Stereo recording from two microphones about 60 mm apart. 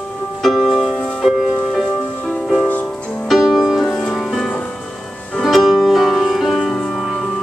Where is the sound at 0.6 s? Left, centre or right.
Centre.